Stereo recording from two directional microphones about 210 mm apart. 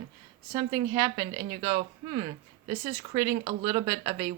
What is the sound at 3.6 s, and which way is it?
Speech, 20° right (ahead or behind).